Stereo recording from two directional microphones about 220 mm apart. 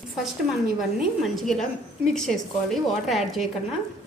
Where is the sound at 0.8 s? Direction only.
Centre (ahead or behind).